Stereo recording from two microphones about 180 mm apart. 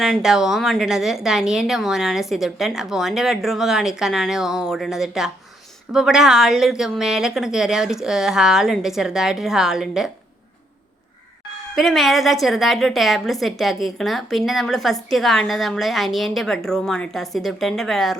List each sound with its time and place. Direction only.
0.0 s a woman's voice: centre (ahead or behind)
11.7 s a woman's voice: centre (ahead or behind)